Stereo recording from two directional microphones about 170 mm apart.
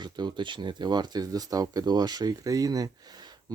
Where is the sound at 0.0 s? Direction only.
25° right (ahead or behind).